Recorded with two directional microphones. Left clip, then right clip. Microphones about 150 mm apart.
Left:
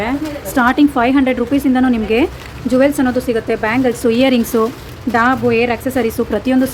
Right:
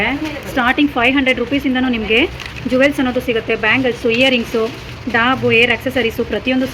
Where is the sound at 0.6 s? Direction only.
20° left (ahead or behind).